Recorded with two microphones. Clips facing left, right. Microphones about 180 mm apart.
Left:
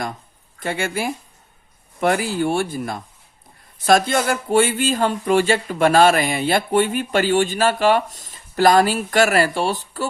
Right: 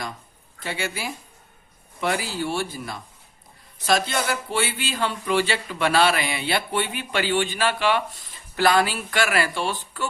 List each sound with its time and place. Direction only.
0.6 s speech: 50° left (ahead or behind)